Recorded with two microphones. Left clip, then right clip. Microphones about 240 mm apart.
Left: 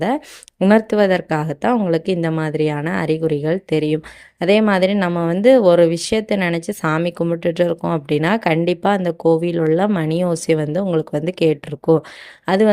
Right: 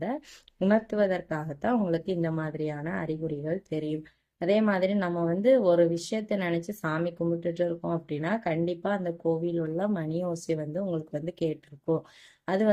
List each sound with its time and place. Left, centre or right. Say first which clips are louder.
0.6 s speech: left 11 dB; left
12.5 s speech: left 11 dB; left